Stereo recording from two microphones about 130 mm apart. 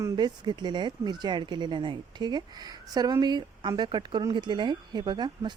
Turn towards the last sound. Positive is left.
turn(degrees=-35)  # may be behind; listen again after turning